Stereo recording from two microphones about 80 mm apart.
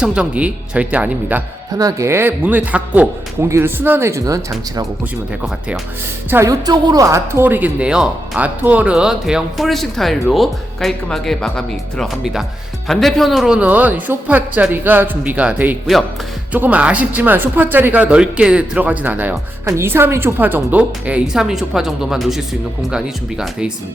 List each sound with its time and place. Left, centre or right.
0.0 s speech: centre
1.8 s speech: right
2.0 s speech: right
6.4 s speech: right
7.0 s speech: right; by 13.6 s centre
13.6 s speech: centre
19.6 s speech: right
21.3 s speech: centre